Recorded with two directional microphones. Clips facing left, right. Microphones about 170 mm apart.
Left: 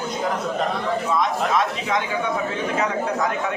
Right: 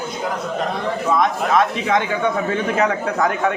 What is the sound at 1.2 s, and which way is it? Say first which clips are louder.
Speech: right 6 dB; 60° right (ahead or behind).